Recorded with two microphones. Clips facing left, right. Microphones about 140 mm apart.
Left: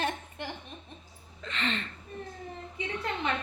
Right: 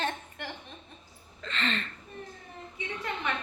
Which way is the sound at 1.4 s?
15° left (ahead or behind).